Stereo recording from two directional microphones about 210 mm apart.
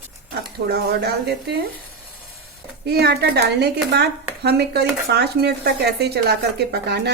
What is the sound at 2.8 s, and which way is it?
Speech, 50° right (ahead or behind).